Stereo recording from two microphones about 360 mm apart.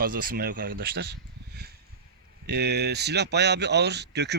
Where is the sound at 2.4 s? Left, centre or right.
Right.